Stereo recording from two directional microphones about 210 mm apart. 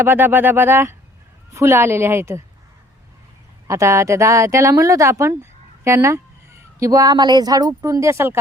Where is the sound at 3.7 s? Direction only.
15° right (ahead or behind).